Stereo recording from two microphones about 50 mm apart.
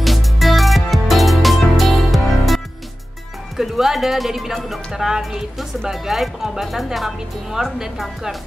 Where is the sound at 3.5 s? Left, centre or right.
Centre.